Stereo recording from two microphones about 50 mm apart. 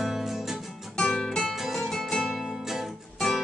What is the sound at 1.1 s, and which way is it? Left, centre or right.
Guitar, centre.